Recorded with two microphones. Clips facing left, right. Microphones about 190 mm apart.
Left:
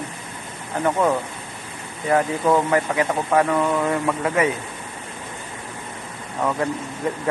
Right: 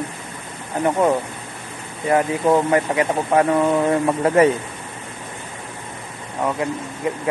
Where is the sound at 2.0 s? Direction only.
25° right (ahead or behind).